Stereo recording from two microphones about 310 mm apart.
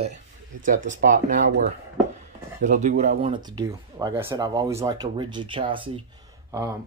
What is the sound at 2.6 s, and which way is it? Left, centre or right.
Speech, right.